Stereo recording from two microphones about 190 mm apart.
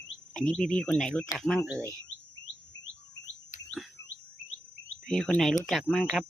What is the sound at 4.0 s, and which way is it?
Bird, 20° left (ahead or behind).